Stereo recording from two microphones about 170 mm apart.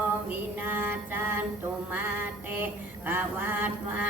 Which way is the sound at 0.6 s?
10° right (ahead or behind).